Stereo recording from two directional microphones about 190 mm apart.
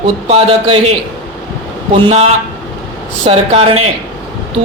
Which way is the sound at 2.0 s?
35° right (ahead or behind).